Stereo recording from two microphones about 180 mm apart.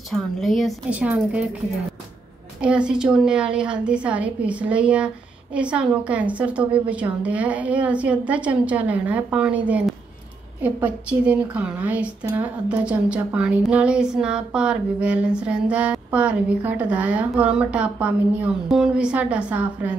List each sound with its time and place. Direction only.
0.1 s a woman's voice: centre (ahead or behind)
2.6 s a woman's voice: 5° right (ahead or behind)